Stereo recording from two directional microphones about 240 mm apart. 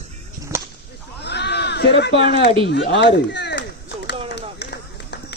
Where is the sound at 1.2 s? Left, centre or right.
Left.